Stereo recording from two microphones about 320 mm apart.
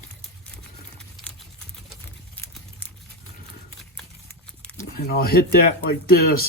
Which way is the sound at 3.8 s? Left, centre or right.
Centre.